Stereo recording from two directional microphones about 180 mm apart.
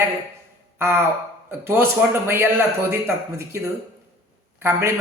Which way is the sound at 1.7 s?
15° right (ahead or behind).